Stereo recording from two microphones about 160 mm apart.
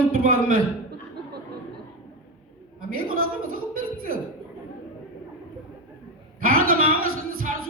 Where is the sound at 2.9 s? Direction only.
60° right (ahead or behind).